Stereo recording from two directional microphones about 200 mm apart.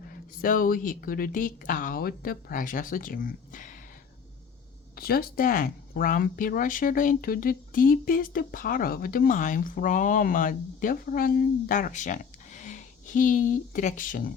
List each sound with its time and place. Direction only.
0.4 s speech: 45° left (ahead or behind)
4.9 s speech: 50° left (ahead or behind)